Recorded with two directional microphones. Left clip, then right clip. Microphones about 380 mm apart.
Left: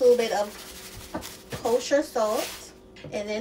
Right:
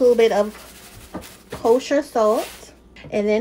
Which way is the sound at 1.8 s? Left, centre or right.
Centre.